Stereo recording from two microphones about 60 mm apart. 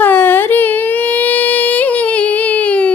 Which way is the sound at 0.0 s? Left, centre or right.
Left.